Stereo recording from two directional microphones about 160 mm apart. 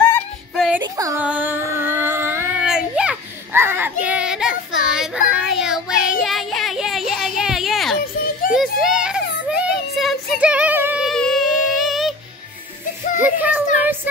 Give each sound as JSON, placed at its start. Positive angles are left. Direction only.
{"t": 0.6, "sound": "music", "side_deg": -5}
{"t": 0.9, "sound": "music", "side_deg": -20}
{"t": 1.2, "sound": "child singing", "side_deg": -10}
{"t": 11.1, "sound": "music", "side_deg": 5}
{"t": 13.2, "sound": "child singing", "side_deg": -10}